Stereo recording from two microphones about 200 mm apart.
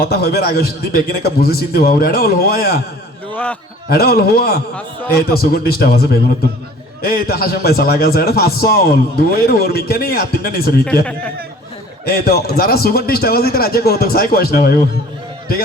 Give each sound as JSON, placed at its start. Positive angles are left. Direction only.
{"t": 0.0, "sound": "a man's voice", "side_deg": 50}
{"t": 3.3, "sound": "a man's voice", "side_deg": 5}
{"t": 3.8, "sound": "a man's voice", "side_deg": 50}
{"t": 12.0, "sound": "a man's voice", "side_deg": 50}